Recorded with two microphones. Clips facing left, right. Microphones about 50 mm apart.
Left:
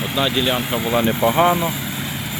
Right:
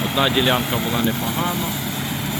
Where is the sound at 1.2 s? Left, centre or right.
Left.